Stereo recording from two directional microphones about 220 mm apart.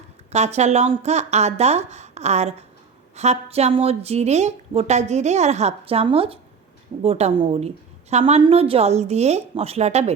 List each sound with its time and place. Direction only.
0.3 s a woman's voice: 30° right (ahead or behind)